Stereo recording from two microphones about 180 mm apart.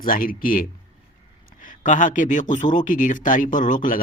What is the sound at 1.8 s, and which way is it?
Speech, 45° left (ahead or behind).